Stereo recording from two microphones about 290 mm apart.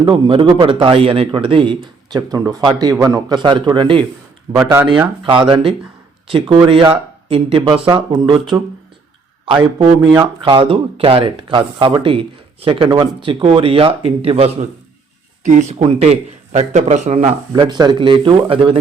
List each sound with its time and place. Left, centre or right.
0.0 s a man's voice: centre
5.2 s a man's voice: centre
10.4 s a man's voice: centre